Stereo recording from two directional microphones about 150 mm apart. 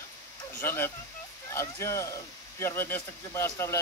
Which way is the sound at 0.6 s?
15° left (ahead or behind).